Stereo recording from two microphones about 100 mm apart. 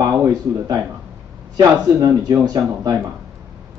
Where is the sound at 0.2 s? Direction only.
40° right (ahead or behind).